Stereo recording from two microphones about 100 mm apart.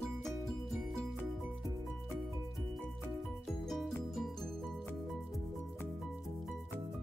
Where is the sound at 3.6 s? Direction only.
Centre (ahead or behind).